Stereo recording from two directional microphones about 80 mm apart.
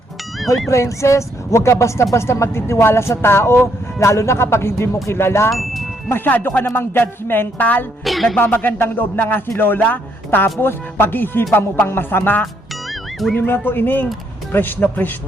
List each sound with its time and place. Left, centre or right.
0.7 s speech: left
5.5 s speech: centre
6.1 s speech: left
8.0 s music: centre
8.4 s speech: left
12.9 s music: centre
13.3 s speech: left